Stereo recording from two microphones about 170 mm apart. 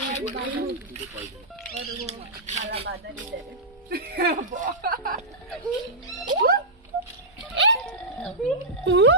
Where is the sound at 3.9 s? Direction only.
65° right (ahead or behind).